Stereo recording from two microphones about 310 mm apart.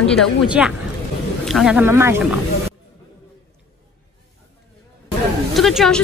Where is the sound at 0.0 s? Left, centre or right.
Centre.